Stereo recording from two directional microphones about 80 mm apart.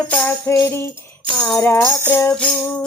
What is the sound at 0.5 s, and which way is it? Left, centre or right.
Music, left.